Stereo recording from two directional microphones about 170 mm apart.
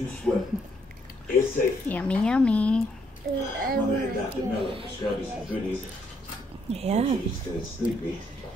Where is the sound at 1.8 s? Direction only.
10° left (ahead or behind).